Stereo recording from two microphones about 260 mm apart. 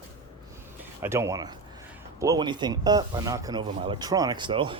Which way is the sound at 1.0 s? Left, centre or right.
Centre.